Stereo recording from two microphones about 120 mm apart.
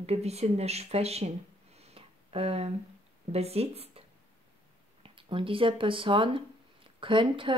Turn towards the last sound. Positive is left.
turn(degrees=-45)  # may be behind; listen again after turning